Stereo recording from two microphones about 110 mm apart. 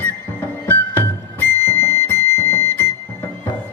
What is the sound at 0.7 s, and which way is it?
Music, 20° left (ahead or behind).